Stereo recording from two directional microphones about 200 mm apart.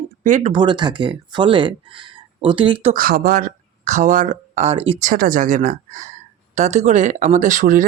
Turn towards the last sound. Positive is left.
turn(degrees=-40)  # may be behind; listen again after turning